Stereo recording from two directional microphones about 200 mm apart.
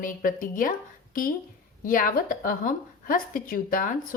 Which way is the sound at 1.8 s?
45° left (ahead or behind).